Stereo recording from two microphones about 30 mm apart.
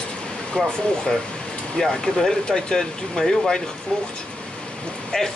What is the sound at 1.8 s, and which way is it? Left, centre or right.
Speech, left.